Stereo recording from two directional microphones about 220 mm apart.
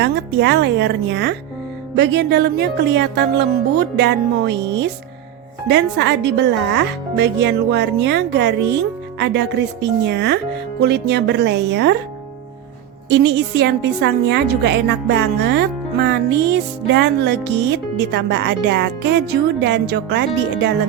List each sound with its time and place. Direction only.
0.0 s a woman's voice: 50° right (ahead or behind)
13.1 s a woman's voice: 50° right (ahead or behind)